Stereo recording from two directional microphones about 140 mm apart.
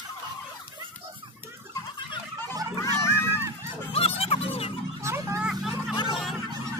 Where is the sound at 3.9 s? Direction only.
45° left (ahead or behind).